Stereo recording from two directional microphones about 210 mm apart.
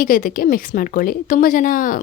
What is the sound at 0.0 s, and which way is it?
A woman's voice, 40° left (ahead or behind).